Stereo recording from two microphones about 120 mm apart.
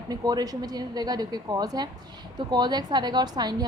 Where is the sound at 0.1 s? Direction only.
30° right (ahead or behind).